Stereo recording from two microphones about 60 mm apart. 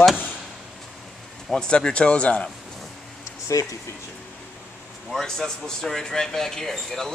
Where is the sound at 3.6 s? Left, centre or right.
Left.